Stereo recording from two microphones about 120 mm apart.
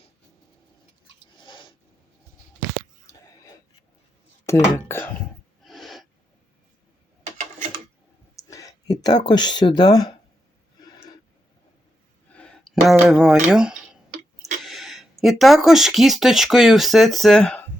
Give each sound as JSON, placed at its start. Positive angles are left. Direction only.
{"t": 1.4, "sound": "a sound", "side_deg": 40}
{"t": 4.4, "sound": "speech", "side_deg": 20}
{"t": 5.6, "sound": "owl", "side_deg": 0}
{"t": 8.4, "sound": "speech", "side_deg": 30}
{"t": 12.3, "sound": "a sound", "side_deg": 10}
{"t": 14.6, "sound": "speech", "side_deg": 0}